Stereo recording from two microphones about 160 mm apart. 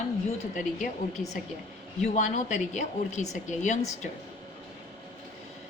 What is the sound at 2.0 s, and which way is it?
A woman's voice, 50° left (ahead or behind).